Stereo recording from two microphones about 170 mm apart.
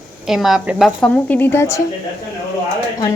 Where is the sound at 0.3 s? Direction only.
Centre (ahead or behind).